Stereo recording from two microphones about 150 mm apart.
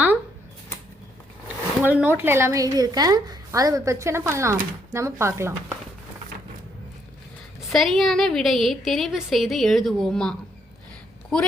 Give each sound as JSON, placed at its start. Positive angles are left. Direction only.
{"t": 1.8, "sound": "a woman's voice", "side_deg": -10}
{"t": 7.7, "sound": "a woman's voice", "side_deg": 0}